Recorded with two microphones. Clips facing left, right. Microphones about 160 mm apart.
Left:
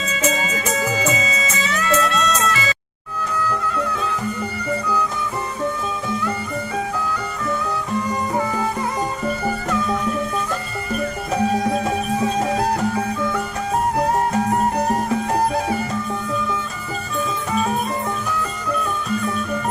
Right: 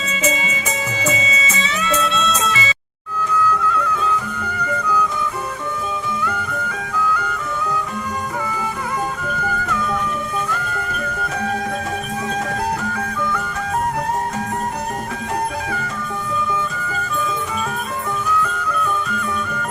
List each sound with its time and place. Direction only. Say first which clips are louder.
0.3 s music: left 1 dB; centre (ahead or behind)